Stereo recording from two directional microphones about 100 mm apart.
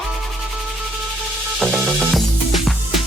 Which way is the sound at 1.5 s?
5° right (ahead or behind).